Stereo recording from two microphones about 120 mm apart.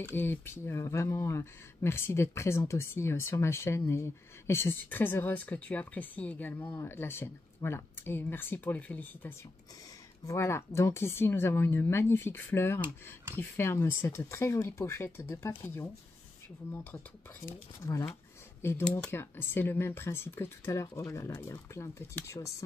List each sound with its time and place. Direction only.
0.0 s speech: 15° left (ahead or behind)
18.6 s speech: 20° left (ahead or behind)